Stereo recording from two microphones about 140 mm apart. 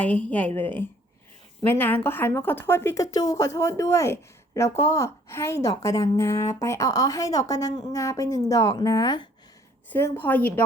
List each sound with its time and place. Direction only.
0.0 s a woman's voice: 10° left (ahead or behind); by 9.2 s 30° left (ahead or behind)
9.9 s a woman's voice: 10° left (ahead or behind)